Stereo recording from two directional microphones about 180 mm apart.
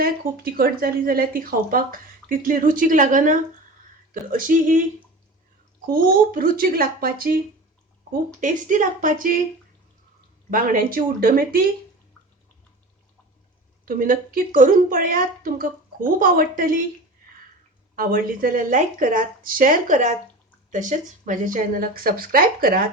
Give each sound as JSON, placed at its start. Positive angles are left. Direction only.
{"t": 0.0, "sound": "a woman's voice", "side_deg": -55}
{"t": 5.9, "sound": "a woman's voice", "side_deg": -50}
{"t": 10.5, "sound": "a woman's voice", "side_deg": -50}
{"t": 13.8, "sound": "a woman's voice", "side_deg": -50}
{"t": 17.9, "sound": "a woman's voice", "side_deg": -50}